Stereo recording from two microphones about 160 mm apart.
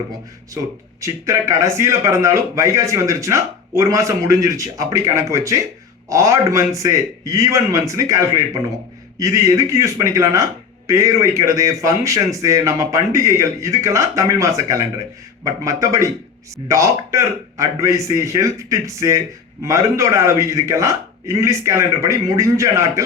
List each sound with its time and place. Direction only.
1.0 s speech: 20° right (ahead or behind)